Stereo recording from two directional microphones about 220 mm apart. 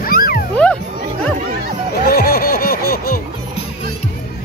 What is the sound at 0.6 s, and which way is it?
Music, 5° left (ahead or behind).